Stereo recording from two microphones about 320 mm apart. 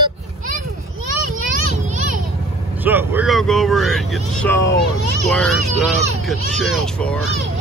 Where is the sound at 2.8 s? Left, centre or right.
Centre.